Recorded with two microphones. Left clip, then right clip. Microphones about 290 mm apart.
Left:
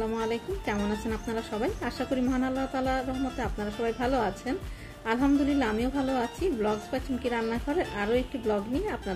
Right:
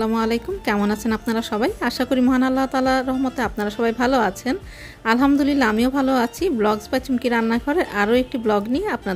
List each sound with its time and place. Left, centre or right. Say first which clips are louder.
0.0 s a woman's voice: right 8 dB; right